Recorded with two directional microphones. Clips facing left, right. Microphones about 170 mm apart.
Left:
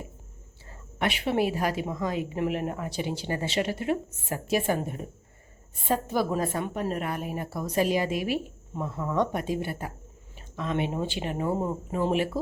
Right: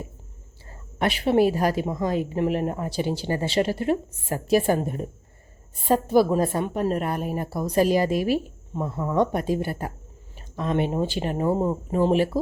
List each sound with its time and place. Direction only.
0.7 s speech: 40° right (ahead or behind)